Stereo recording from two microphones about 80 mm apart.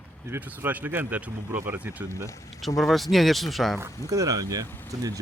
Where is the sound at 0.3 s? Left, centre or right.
Right.